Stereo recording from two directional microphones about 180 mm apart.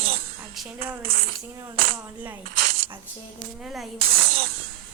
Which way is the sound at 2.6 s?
50° right (ahead or behind).